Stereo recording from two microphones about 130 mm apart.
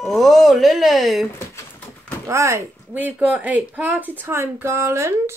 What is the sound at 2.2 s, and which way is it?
Speech, 20° right (ahead or behind).